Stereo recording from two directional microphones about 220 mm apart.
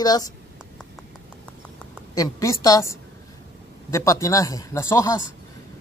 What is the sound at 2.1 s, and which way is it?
Speech, 15° left (ahead or behind).